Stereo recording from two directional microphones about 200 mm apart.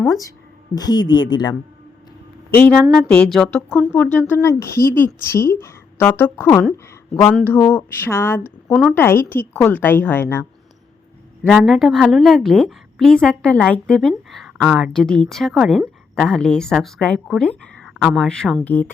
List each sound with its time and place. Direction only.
0.8 s speech: 20° left (ahead or behind)
2.5 s a woman's voice: 5° left (ahead or behind)
11.4 s a woman's voice: centre (ahead or behind)